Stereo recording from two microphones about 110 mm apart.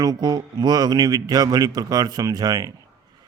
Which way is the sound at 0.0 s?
35° right (ahead or behind).